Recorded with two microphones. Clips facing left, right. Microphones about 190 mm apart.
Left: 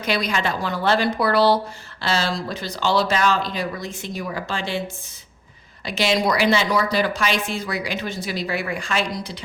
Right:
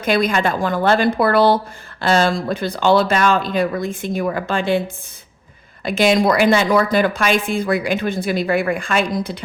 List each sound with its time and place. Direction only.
0.0 s a woman's voice: 50° right (ahead or behind)
5.8 s a woman's voice: 50° right (ahead or behind)